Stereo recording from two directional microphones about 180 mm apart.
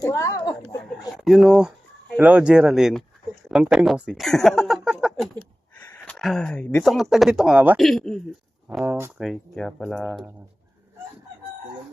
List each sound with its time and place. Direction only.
0.0 s a sound: 20° left (ahead or behind)
1.1 s speech: centre (ahead or behind)
3.5 s a sound: centre (ahead or behind)
5.9 s speech: 5° left (ahead or behind)
8.8 s speech: 10° right (ahead or behind)
9.2 s speech: centre (ahead or behind)